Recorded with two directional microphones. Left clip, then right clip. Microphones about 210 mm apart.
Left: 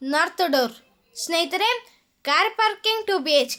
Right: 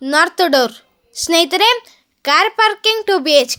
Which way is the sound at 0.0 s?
40° right (ahead or behind).